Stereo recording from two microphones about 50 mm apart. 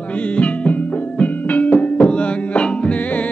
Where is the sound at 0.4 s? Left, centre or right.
Left.